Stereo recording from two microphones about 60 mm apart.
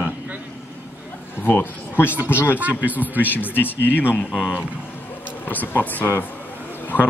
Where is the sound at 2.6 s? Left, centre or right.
Right.